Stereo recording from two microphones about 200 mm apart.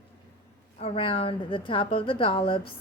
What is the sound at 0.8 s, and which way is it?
A woman's voice, 30° left (ahead or behind).